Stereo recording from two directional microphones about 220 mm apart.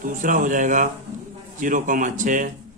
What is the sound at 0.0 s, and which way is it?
Speech, 40° right (ahead or behind).